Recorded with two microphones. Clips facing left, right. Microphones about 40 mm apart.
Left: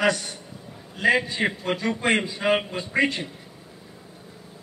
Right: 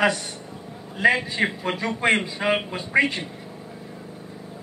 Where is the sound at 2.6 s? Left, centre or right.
Centre.